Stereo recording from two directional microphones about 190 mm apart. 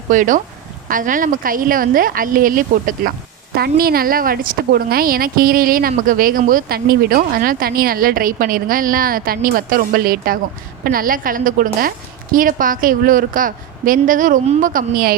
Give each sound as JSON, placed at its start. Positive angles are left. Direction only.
{"t": 0.1, "sound": "speech", "side_deg": -45}